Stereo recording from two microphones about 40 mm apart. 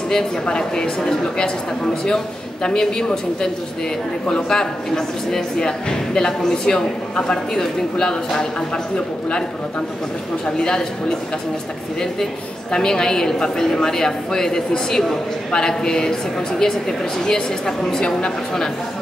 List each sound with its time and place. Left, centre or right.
0.1 s speech: centre
10.4 s speech: centre
12.7 s speech: centre